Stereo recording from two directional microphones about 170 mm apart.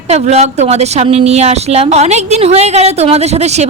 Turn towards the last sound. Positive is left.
turn(degrees=-40)  # may be behind; listen again after turning